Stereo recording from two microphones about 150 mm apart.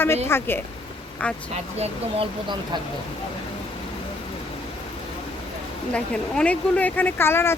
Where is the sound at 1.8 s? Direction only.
40° right (ahead or behind).